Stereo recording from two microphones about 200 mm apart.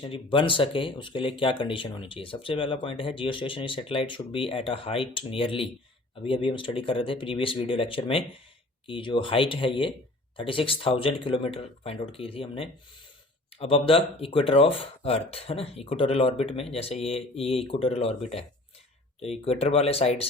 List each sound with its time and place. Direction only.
0.0 s speech: 25° left (ahead or behind)